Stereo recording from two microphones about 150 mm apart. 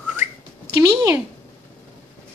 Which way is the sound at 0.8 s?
20° right (ahead or behind).